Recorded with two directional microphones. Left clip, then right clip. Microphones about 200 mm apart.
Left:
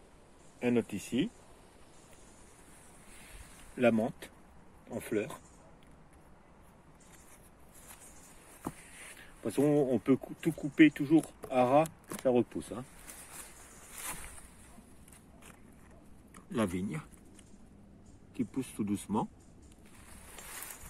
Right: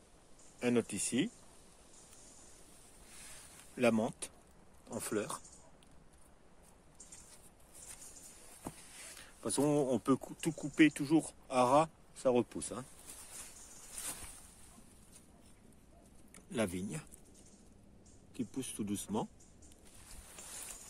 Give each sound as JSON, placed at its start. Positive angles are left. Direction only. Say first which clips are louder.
{"t": 0.6, "sound": "speech", "louder": "left 2 dB", "side_deg": -15}
{"t": 3.7, "sound": "speech", "louder": "left 3 dB", "side_deg": -15}
{"t": 9.2, "sound": "speech", "louder": "left 4 dB", "side_deg": -15}
{"t": 16.3, "sound": "speech", "louder": "left 3 dB", "side_deg": -10}
{"t": 18.3, "sound": "speech", "louder": "left 5 dB", "side_deg": -5}